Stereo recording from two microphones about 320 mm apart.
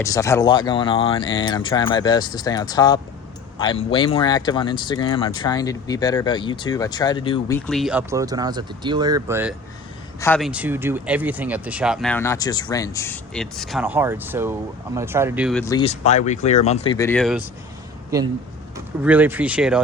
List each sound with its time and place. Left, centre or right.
0.0 s speech: centre
10.2 s speech: centre
15.6 s speech: centre
19.0 s speech: centre